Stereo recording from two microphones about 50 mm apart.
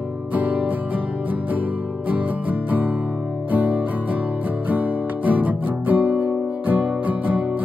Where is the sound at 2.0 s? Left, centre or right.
Right.